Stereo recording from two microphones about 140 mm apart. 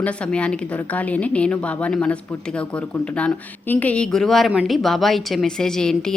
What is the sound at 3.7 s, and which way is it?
A woman's voice, 10° left (ahead or behind).